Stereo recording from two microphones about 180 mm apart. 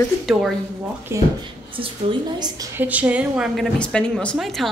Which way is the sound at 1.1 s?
15° right (ahead or behind).